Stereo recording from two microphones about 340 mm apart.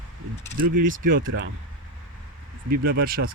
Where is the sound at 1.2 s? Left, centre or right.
Right.